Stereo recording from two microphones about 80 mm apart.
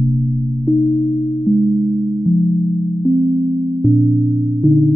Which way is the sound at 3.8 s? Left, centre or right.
Centre.